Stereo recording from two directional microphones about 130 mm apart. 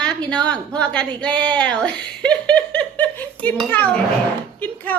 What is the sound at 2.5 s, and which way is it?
Dishes, 10° left (ahead or behind).